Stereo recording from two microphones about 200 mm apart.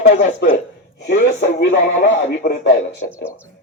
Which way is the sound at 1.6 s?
65° left (ahead or behind).